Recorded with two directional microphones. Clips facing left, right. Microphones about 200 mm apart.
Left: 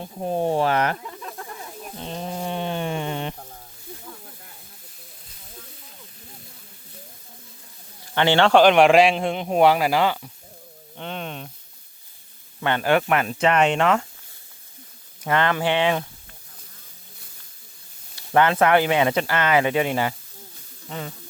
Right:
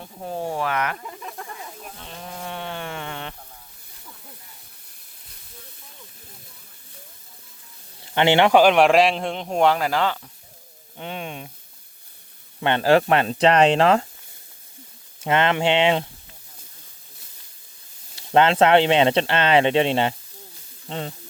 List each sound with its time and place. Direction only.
0.0 s speech: 20° left (ahead or behind)
1.0 s snake: 5° right (ahead or behind)
2.0 s a sound: 30° left (ahead or behind)
8.0 s speech: 20° right (ahead or behind)
8.6 s a man's voice: centre (ahead or behind)
10.9 s a sound: 10° right (ahead or behind)
12.5 s speech: 25° right (ahead or behind)
15.2 s speech: 20° right (ahead or behind)
18.2 s speech: 25° right (ahead or behind)